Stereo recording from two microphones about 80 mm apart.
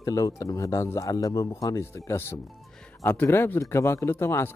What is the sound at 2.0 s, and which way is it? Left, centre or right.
Speech, left.